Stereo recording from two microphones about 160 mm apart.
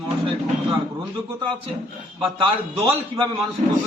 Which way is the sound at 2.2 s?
30° right (ahead or behind).